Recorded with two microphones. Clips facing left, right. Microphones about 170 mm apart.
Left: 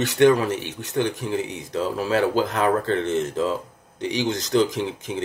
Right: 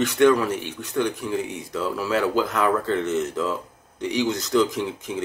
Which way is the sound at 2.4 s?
45° left (ahead or behind).